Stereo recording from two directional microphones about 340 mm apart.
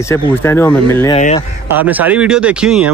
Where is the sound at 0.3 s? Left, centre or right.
Centre.